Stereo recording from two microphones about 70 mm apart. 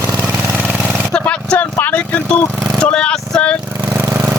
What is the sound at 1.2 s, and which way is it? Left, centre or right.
Vehicle, centre.